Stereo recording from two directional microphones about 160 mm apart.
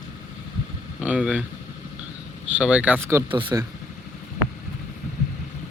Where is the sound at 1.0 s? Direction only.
5° right (ahead or behind).